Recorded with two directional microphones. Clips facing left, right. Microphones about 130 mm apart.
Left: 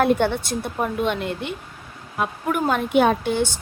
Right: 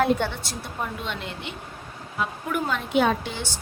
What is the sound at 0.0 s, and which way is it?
A woman's voice, 55° left (ahead or behind).